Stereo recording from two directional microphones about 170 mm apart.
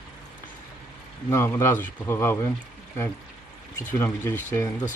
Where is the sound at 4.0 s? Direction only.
15° left (ahead or behind).